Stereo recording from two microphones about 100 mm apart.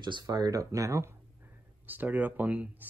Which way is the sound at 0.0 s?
45° right (ahead or behind).